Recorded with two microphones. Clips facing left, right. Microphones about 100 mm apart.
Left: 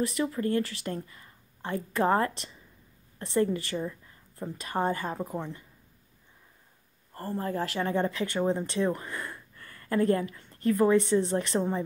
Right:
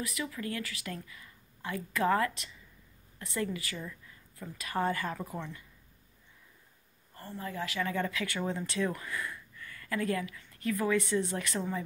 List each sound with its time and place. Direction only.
0.0 s speech: 40° left (ahead or behind)
7.2 s speech: 45° left (ahead or behind); by 11.8 s 30° left (ahead or behind)